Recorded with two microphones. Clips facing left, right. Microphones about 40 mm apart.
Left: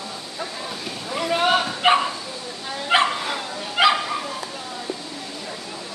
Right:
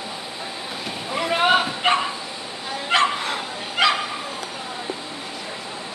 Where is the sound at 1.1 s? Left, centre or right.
Centre.